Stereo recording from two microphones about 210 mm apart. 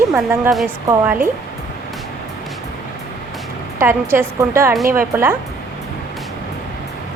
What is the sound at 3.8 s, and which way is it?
Speech, 10° right (ahead or behind).